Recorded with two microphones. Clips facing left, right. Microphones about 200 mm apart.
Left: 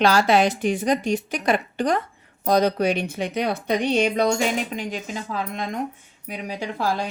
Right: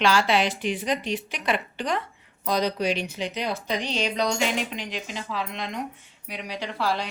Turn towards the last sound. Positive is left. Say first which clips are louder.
# left 2 dB
turn(degrees=45)  # may be behind; listen again after turning